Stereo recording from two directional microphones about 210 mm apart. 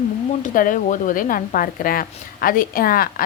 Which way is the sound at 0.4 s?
40° left (ahead or behind).